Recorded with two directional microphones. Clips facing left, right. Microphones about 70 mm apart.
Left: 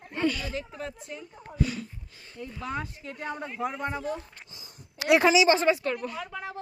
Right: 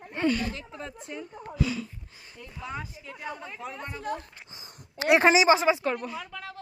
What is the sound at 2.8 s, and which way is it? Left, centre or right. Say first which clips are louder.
Speech: left 3 dB; left.